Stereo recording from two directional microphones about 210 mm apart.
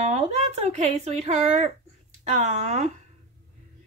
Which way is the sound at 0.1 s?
30° right (ahead or behind).